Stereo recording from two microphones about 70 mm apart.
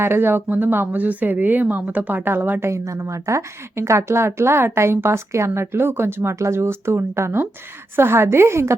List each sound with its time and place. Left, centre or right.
0.0 s speech: right
2.6 s speech: right